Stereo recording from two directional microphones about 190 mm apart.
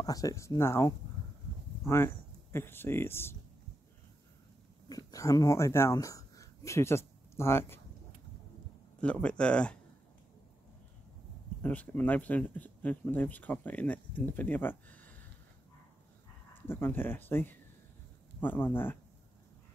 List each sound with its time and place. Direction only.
0.0 s speech: 20° left (ahead or behind)
2.5 s speech: 10° left (ahead or behind)
4.8 s speech: 20° left (ahead or behind)
9.0 s speech: 5° left (ahead or behind)
11.6 s speech: 10° left (ahead or behind)
16.6 s speech: 10° left (ahead or behind)